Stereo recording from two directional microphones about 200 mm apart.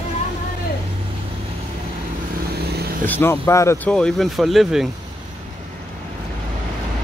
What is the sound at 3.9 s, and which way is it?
Speech, centre (ahead or behind).